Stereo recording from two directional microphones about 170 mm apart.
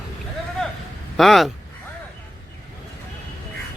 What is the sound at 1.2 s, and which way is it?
Speech, centre (ahead or behind).